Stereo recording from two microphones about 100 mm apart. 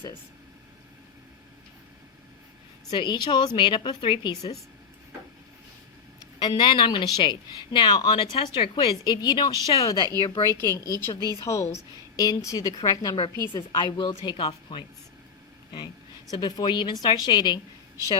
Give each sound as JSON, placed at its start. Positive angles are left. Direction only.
{"t": 2.9, "sound": "speech", "side_deg": 45}
{"t": 6.4, "sound": "speech", "side_deg": 50}
{"t": 9.6, "sound": "a woman's voice", "side_deg": 40}
{"t": 10.4, "sound": "a woman's voice", "side_deg": 30}
{"t": 16.3, "sound": "speech", "side_deg": 40}